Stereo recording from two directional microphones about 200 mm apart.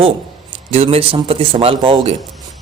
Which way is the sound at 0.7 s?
30° right (ahead or behind).